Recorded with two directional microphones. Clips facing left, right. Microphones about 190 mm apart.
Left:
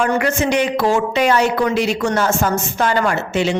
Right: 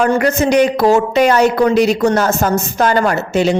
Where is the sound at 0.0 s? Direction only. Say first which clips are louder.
Right 4 dB; 40° right (ahead or behind).